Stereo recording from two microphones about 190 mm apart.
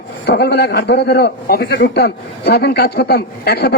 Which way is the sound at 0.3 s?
60° left (ahead or behind).